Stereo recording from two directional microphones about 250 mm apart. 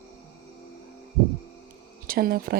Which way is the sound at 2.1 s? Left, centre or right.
Right.